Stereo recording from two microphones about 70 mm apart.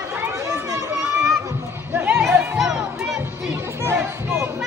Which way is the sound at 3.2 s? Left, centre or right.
Right.